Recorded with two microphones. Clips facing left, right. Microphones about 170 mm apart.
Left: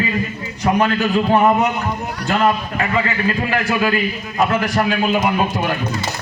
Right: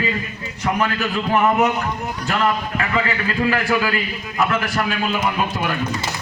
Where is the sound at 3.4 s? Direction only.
25° left (ahead or behind).